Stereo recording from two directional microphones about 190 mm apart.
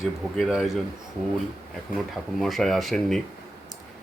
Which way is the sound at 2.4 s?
Centre (ahead or behind).